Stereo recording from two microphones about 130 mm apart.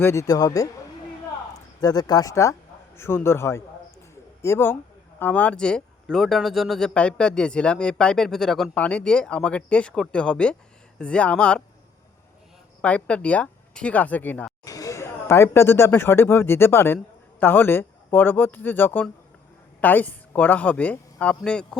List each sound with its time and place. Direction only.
0.0 s speech: 20° left (ahead or behind)
1.8 s speech: 30° left (ahead or behind)
4.1 s a sound: 20° left (ahead or behind)
5.2 s speech: 10° left (ahead or behind)
12.8 s speech: 10° left (ahead or behind)
14.6 s speech: 25° left (ahead or behind); by 21.8 s 5° left (ahead or behind)